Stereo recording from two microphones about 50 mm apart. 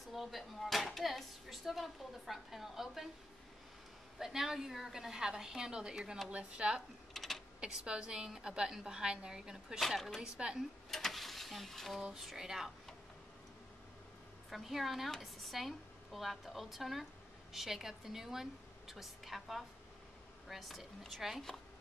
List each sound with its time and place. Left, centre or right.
0.1 s speech: centre
4.2 s a woman's voice: centre
7.2 s typing: centre
7.6 s a woman's voice: centre
9.8 s speech: centre
10.2 s a woman's voice: centre
10.9 s a sound: centre
12.0 s a woman's voice: centre
14.5 s speech: centre